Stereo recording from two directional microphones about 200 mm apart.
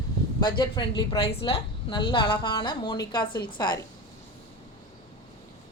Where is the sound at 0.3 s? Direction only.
20° left (ahead or behind).